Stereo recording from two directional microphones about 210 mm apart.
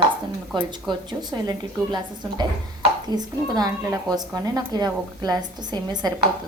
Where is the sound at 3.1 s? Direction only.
20° right (ahead or behind).